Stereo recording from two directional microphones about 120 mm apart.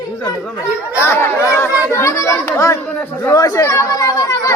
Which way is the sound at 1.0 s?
20° left (ahead or behind).